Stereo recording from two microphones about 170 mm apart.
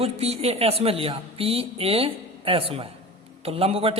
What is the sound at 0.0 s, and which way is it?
A man's voice, 35° right (ahead or behind).